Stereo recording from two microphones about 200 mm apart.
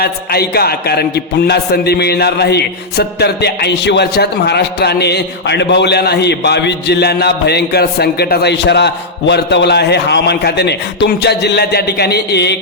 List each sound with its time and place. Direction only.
0.0 s a man's voice: 50° left (ahead or behind)